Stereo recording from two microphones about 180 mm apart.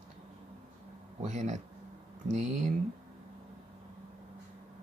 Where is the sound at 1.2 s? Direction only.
40° right (ahead or behind).